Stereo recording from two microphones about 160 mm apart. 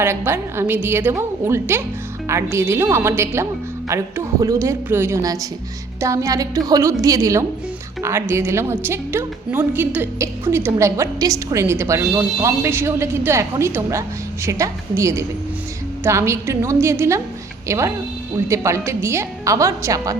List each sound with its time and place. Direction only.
0.0 s a woman's voice: 15° right (ahead or behind)